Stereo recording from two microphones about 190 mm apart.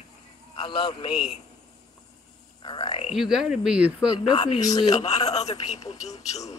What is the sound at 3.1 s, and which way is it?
Speech, centre (ahead or behind).